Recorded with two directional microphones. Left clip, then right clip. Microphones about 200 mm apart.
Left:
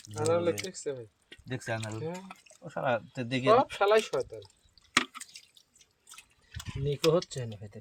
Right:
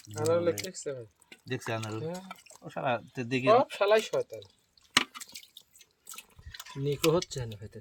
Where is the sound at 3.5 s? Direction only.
5° left (ahead or behind).